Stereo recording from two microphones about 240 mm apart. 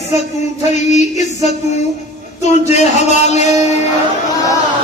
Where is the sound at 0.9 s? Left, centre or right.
Left.